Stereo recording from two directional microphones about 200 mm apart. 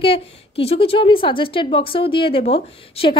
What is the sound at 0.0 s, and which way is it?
A woman's voice, 30° left (ahead or behind).